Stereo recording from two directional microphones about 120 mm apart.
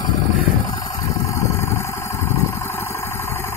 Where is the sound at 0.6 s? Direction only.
30° left (ahead or behind).